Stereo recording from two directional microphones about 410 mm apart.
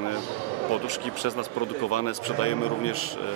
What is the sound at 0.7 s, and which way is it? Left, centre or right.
Speech, left.